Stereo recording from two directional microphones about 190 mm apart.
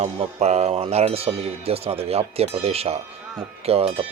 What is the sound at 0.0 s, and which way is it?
Speech, 35° right (ahead or behind).